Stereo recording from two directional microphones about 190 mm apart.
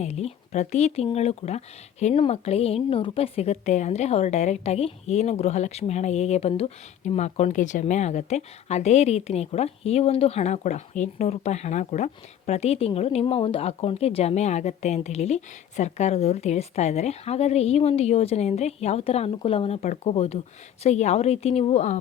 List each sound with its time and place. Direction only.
0.0 s speech: 35° left (ahead or behind)